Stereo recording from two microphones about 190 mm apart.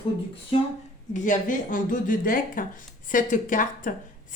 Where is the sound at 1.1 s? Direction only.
40° left (ahead or behind).